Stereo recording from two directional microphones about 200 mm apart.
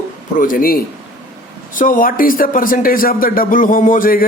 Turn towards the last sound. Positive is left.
turn(degrees=45)  # may be behind; listen again after turning